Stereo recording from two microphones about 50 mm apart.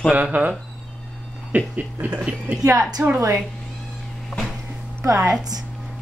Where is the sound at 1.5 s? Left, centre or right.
Right.